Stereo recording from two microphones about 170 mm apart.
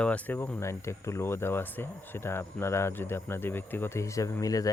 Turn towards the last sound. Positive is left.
turn(degrees=20)  # may be behind; listen again after turning